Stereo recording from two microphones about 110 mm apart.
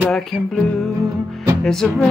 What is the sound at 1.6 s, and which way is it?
Music, 5° left (ahead or behind).